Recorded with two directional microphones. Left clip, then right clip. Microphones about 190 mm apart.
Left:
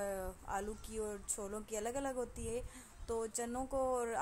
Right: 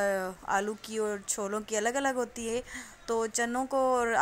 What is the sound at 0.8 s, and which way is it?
A woman's voice, 20° right (ahead or behind).